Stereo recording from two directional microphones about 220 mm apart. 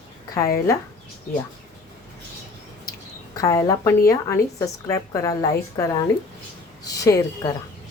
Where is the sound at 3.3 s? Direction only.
15° left (ahead or behind).